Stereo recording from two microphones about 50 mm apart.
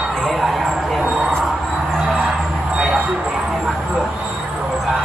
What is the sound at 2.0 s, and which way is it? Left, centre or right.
Music, centre.